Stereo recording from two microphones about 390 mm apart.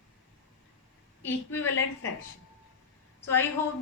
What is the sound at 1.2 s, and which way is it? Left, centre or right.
Speech, centre.